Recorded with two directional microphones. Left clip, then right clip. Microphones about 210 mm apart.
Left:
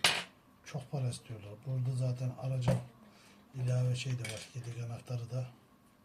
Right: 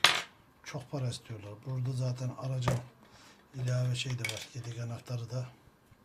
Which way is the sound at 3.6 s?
40° right (ahead or behind).